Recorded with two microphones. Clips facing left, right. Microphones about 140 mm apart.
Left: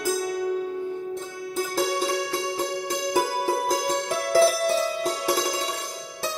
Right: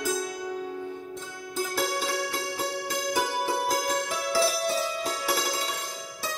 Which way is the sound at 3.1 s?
40° left (ahead or behind).